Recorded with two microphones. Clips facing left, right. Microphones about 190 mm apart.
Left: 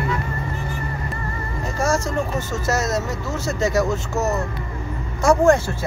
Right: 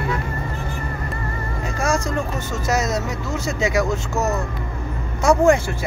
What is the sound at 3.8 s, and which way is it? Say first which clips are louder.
Speech: even; 5° left (ahead or behind).